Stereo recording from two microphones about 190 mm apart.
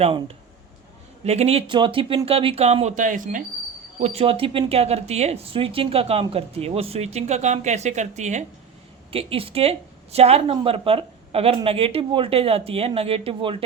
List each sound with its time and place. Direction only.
0.0 s speech: 30° right (ahead or behind)
4.0 s speech: 30° right (ahead or behind)